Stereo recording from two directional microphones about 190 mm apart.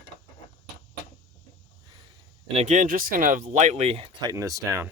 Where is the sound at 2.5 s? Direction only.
35° right (ahead or behind).